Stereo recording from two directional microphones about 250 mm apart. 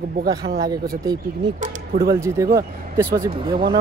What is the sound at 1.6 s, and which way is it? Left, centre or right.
Speech, right.